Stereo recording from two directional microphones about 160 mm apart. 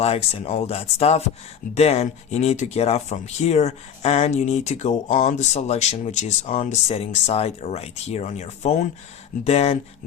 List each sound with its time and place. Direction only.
0.0 s speech: 40° left (ahead or behind)